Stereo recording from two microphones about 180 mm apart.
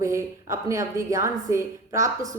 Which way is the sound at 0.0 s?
15° right (ahead or behind).